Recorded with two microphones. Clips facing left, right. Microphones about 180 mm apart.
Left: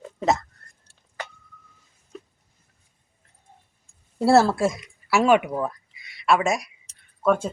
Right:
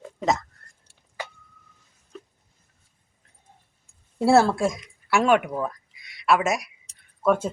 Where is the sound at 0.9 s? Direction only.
10° right (ahead or behind).